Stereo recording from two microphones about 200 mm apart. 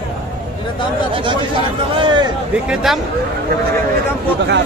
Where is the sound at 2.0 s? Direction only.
25° right (ahead or behind).